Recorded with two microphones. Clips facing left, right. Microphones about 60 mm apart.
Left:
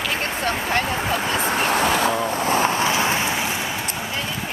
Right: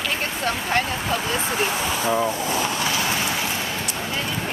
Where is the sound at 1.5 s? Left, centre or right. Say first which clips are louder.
Left 4 dB; left.